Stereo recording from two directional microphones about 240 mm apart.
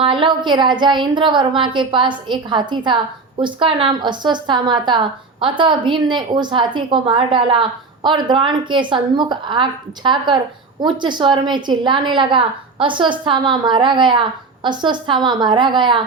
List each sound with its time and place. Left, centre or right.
0.0 s a woman's voice: right